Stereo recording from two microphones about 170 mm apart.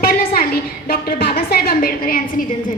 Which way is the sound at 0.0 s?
60° left (ahead or behind).